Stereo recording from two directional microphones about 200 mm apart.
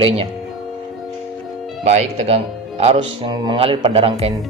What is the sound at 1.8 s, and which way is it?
Speech, 35° right (ahead or behind).